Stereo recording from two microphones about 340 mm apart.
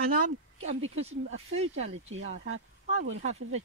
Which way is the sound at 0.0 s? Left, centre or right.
Right.